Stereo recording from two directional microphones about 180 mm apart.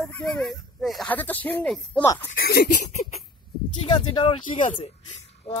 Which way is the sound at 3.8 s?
25° left (ahead or behind).